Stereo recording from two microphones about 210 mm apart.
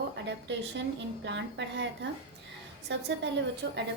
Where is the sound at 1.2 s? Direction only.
55° right (ahead or behind).